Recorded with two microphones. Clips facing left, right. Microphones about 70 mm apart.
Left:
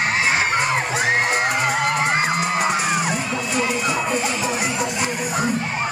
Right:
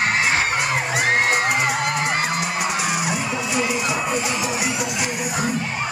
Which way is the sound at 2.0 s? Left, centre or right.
Left.